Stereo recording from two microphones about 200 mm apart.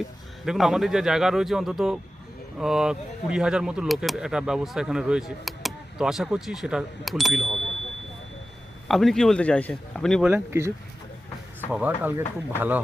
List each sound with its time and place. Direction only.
0.4 s speech: centre (ahead or behind)
8.9 s speech: centre (ahead or behind)
10.3 s speech: 10° right (ahead or behind)
11.7 s speech: 10° right (ahead or behind)